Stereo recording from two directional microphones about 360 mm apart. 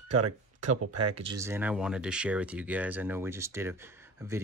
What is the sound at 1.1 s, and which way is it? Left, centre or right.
Speech, centre.